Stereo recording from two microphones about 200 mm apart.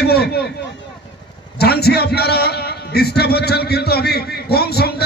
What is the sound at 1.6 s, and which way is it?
A man's voice, 50° left (ahead or behind).